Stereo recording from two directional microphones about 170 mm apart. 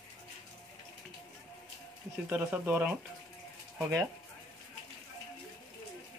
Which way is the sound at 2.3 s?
10° right (ahead or behind).